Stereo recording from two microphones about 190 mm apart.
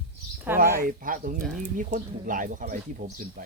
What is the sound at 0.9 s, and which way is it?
Speech, 45° right (ahead or behind).